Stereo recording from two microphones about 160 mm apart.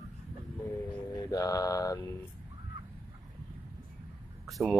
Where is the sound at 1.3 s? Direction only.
20° left (ahead or behind).